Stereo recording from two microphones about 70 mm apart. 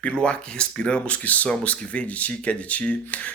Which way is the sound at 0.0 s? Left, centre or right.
Centre.